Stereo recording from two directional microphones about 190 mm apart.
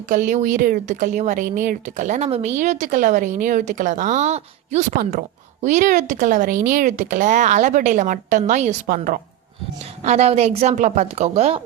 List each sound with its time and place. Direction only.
0.1 s speech: 40° right (ahead or behind)